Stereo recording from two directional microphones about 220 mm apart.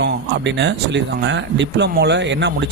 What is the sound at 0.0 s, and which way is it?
Speech, 50° right (ahead or behind).